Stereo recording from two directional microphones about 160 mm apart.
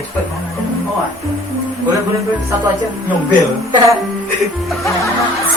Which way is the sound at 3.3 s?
30° right (ahead or behind).